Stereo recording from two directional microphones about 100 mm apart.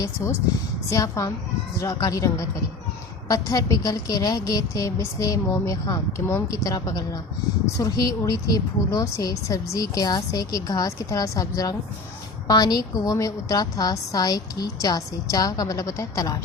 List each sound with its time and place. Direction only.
0.9 s a woman's voice: 30° left (ahead or behind)